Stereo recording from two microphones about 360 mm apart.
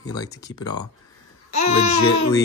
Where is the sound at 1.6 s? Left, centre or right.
Left.